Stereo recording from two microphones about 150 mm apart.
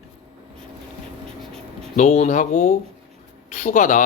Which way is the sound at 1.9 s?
55° left (ahead or behind).